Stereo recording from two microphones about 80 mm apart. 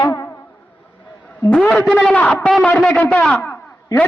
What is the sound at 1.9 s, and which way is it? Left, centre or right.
A man's voice, centre.